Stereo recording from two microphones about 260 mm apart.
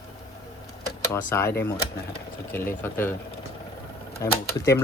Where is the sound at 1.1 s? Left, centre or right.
Centre.